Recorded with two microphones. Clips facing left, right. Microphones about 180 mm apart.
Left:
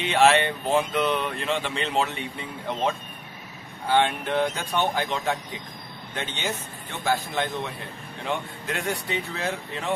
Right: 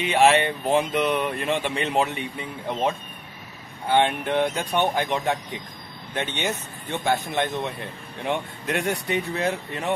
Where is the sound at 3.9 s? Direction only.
20° right (ahead or behind).